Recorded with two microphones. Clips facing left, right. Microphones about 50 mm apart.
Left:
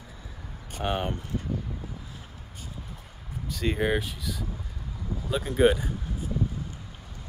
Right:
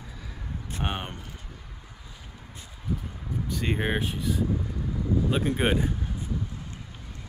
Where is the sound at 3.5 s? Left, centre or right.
Centre.